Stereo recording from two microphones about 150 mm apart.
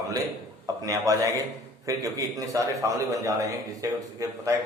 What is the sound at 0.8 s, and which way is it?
A man's voice, 25° right (ahead or behind).